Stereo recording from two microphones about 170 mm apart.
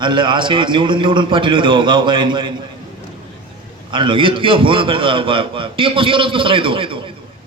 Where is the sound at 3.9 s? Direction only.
30° right (ahead or behind).